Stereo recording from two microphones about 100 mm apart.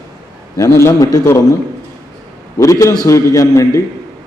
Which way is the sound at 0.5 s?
30° left (ahead or behind).